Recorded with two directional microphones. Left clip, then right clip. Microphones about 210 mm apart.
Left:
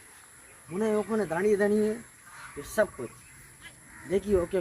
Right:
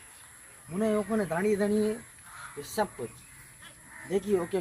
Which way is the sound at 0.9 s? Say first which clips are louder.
Left 1 dB; 15° left (ahead or behind).